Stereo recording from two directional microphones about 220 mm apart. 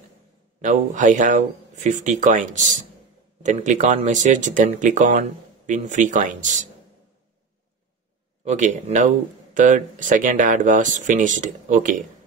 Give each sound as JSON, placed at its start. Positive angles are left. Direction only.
{"t": 0.6, "sound": "speech", "side_deg": -35}
{"t": 8.5, "sound": "speech", "side_deg": -30}